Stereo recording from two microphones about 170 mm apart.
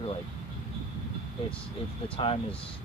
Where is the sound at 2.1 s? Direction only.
35° left (ahead or behind).